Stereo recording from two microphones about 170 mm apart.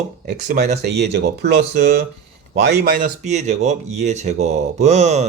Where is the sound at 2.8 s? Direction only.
55° right (ahead or behind).